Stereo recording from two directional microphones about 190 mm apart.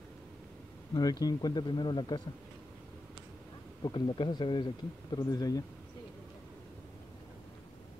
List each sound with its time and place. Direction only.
1.2 s speech: 20° left (ahead or behind)
3.8 s speech: 25° left (ahead or behind)